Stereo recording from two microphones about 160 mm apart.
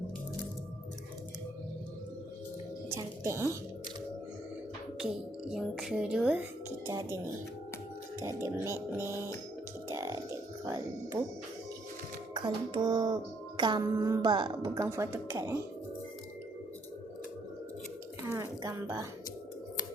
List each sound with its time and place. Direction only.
2.9 s speech: 15° right (ahead or behind)
5.5 s speech: 5° right (ahead or behind)
8.6 s speech: 15° right (ahead or behind)
9.9 s a sound: 20° right (ahead or behind)
11.1 s speech: 15° right (ahead or behind)
12.3 s a woman's voice: 30° right (ahead or behind)
18.3 s a sound: 20° right (ahead or behind)